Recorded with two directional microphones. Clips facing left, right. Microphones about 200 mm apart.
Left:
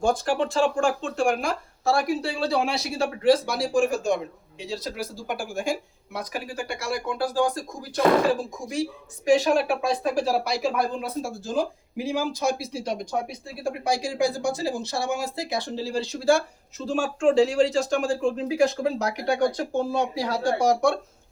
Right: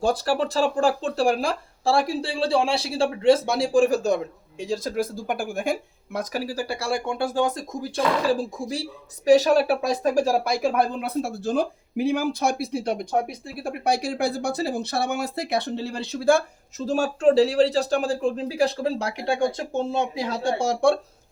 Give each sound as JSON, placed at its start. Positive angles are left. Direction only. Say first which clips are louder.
{"t": 0.0, "sound": "speech", "louder": "right 1 dB", "side_deg": -35}
{"t": 4.6, "sound": "speech", "louder": "right 6 dB", "side_deg": -50}
{"t": 6.1, "sound": "speech", "louder": "right 4 dB", "side_deg": -40}
{"t": 8.3, "sound": "speech", "louder": "right 2 dB", "side_deg": -35}